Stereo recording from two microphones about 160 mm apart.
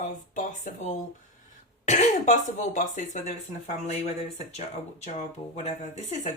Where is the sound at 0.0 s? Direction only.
50° left (ahead or behind).